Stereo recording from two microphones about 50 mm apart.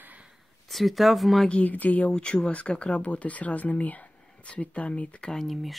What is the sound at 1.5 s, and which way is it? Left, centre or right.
Speech, left.